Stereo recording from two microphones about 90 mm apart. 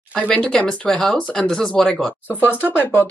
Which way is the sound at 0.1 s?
10° left (ahead or behind).